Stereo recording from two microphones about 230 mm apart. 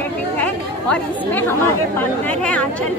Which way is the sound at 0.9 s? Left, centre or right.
Centre.